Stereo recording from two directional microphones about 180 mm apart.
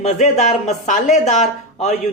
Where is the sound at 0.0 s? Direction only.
40° left (ahead or behind).